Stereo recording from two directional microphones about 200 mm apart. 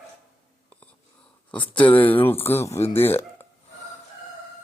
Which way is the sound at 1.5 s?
5° left (ahead or behind).